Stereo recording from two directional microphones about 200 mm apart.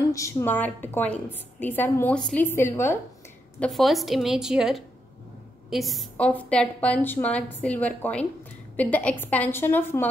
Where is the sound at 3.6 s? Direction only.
Centre (ahead or behind).